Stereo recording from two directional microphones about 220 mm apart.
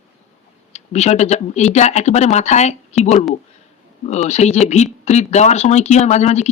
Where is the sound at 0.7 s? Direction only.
30° left (ahead or behind).